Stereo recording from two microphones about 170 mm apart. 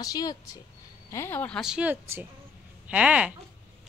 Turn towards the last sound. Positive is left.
turn(degrees=-5)  # may be behind; listen again after turning